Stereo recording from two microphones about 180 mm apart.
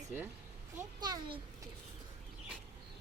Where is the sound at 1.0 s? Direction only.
25° right (ahead or behind).